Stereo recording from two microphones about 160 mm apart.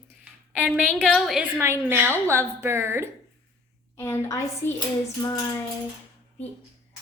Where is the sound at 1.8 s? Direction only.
15° right (ahead or behind).